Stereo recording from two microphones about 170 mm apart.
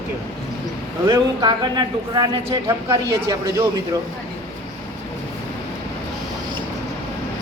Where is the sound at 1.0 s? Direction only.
25° right (ahead or behind).